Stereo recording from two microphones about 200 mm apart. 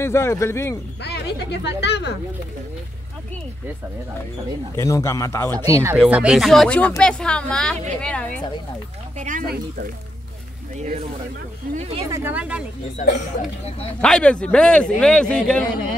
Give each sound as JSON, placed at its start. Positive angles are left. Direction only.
{"t": 0.0, "sound": "a man's voice", "side_deg": 15}
{"t": 1.0, "sound": "speech", "side_deg": 55}
{"t": 4.7, "sound": "a man's voice", "side_deg": 15}
{"t": 5.7, "sound": "speech", "side_deg": -15}
{"t": 9.2, "sound": "speech", "side_deg": -40}
{"t": 10.8, "sound": "speech", "side_deg": -35}
{"t": 12.1, "sound": "speech", "side_deg": -10}
{"t": 14.0, "sound": "speech", "side_deg": 5}